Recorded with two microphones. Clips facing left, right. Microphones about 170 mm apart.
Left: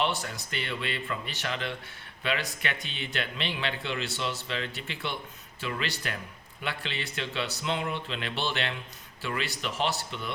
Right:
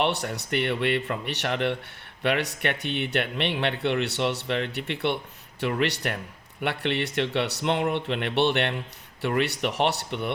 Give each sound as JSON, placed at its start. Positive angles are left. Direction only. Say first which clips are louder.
{"t": 0.0, "sound": "speech", "louder": "right 4 dB", "side_deg": -65}